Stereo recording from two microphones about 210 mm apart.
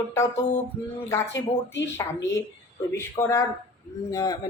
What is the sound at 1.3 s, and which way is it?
Speech, 60° left (ahead or behind).